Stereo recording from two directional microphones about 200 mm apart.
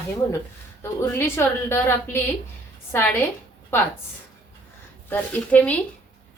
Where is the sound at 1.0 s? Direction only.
10° left (ahead or behind).